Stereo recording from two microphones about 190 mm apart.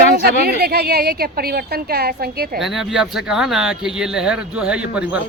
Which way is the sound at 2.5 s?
Centre (ahead or behind).